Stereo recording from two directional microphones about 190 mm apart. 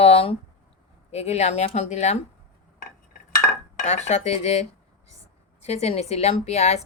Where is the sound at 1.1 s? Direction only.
35° left (ahead or behind).